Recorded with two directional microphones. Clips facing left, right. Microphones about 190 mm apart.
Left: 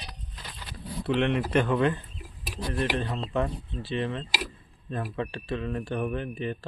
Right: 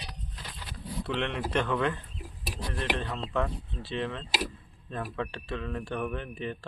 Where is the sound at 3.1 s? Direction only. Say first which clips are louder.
Left 2 dB; 20° left (ahead or behind).